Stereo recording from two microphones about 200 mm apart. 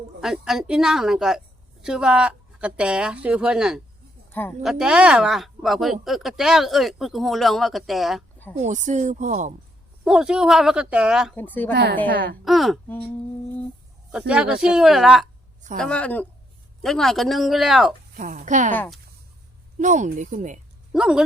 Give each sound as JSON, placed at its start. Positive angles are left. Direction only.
{"t": 0.2, "sound": "speech", "side_deg": 0}
{"t": 4.3, "sound": "speech", "side_deg": 10}
{"t": 4.6, "sound": "speech", "side_deg": -5}
{"t": 8.6, "sound": "speech", "side_deg": -35}
{"t": 10.0, "sound": "speech", "side_deg": -5}
{"t": 11.3, "sound": "speech", "side_deg": 10}
{"t": 11.7, "sound": "a woman's voice", "side_deg": -60}
{"t": 12.5, "sound": "speech", "side_deg": 0}
{"t": 14.1, "sound": "speech", "side_deg": -5}
{"t": 18.2, "sound": "speech", "side_deg": -35}
{"t": 18.7, "sound": "speech", "side_deg": 10}
{"t": 19.8, "sound": "speech", "side_deg": -40}
{"t": 20.9, "sound": "speech", "side_deg": -5}